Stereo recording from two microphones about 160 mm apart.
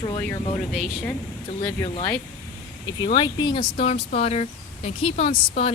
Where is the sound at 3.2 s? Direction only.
30° left (ahead or behind).